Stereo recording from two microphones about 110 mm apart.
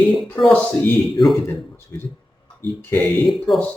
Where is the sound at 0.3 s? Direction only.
Centre (ahead or behind).